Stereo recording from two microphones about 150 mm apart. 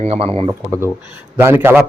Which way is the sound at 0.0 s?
40° right (ahead or behind).